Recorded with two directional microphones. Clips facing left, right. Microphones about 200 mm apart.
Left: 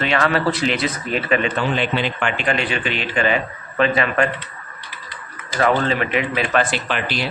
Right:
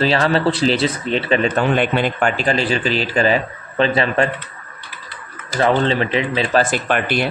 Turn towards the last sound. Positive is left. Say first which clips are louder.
# right 5 dB
turn(degrees=-50)  # may be behind; listen again after turning